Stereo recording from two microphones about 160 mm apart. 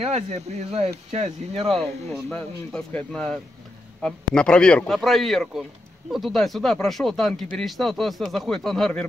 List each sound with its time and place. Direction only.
0.0 s speech: 45° right (ahead or behind)
2.2 s speech: 5° left (ahead or behind)